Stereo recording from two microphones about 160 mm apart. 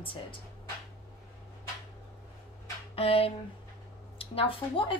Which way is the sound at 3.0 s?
35° left (ahead or behind).